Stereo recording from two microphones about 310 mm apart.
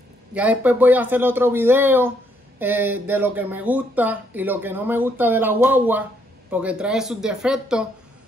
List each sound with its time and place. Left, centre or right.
0.3 s speech: centre